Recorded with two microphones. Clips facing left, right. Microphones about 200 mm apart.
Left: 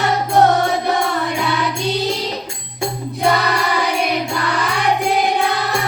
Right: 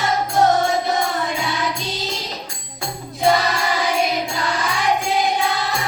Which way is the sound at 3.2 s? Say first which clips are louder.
Even; 60° left (ahead or behind).